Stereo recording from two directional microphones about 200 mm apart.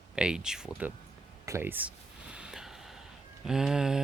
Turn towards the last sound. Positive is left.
turn(degrees=-5)  # may be behind; listen again after turning